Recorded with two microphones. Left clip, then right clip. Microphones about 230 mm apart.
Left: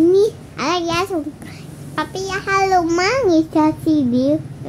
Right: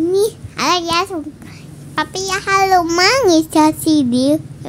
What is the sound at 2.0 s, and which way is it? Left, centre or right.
Mantra, right.